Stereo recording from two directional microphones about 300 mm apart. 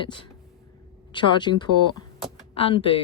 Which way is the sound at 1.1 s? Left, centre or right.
Centre.